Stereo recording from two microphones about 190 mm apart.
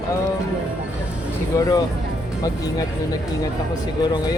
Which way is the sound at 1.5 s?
20° left (ahead or behind).